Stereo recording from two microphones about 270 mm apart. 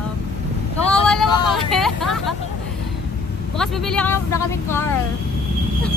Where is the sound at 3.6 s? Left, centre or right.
Centre.